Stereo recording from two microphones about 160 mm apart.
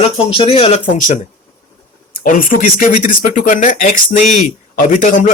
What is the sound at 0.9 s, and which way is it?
Speech, 55° left (ahead or behind).